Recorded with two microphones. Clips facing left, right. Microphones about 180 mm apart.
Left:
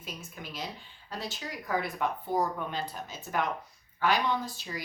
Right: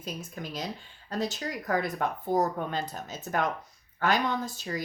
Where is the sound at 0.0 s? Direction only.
40° right (ahead or behind).